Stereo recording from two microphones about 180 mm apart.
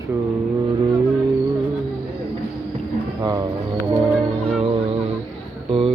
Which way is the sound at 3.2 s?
20° right (ahead or behind).